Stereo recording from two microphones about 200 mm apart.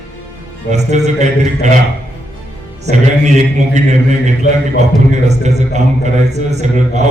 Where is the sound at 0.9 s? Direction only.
35° right (ahead or behind).